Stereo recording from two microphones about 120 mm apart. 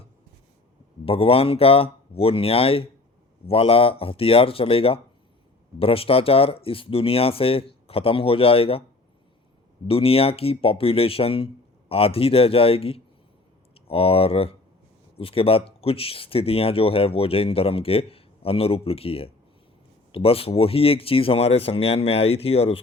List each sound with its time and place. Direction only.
1.0 s speech: 50° left (ahead or behind)
9.8 s speech: 50° left (ahead or behind)